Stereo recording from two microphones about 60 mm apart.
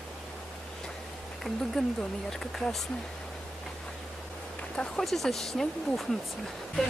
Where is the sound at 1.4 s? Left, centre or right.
Centre.